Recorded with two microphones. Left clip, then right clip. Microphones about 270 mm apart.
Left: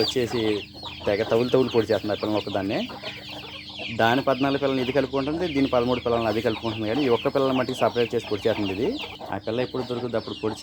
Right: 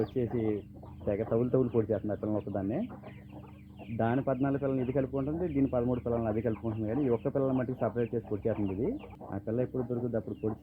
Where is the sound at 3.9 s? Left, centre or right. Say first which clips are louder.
Left 10 dB; centre.